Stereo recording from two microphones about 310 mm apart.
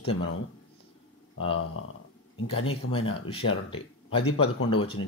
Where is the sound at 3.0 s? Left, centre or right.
Centre.